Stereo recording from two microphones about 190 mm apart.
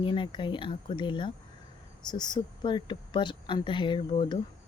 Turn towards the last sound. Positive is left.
turn(degrees=25)  # may be behind; listen again after turning